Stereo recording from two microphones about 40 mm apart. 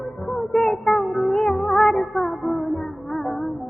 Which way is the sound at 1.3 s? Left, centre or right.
Centre.